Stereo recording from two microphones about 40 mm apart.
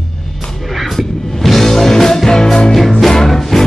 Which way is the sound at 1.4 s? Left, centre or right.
Centre.